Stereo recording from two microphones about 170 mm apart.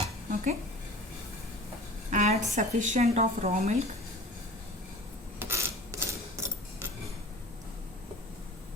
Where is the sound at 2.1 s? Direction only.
45° right (ahead or behind).